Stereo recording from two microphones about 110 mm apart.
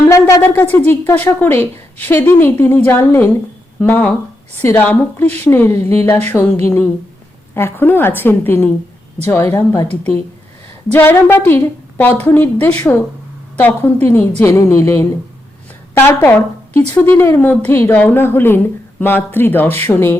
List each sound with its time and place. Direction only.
0.1 s speech: 30° left (ahead or behind)
0.4 s a woman's voice: 15° left (ahead or behind)
10.9 s a woman's voice: 20° left (ahead or behind)